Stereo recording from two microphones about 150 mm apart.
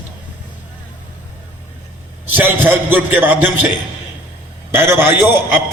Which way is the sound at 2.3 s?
15° right (ahead or behind).